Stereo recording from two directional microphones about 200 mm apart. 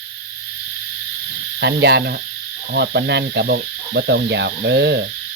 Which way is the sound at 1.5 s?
55° right (ahead or behind).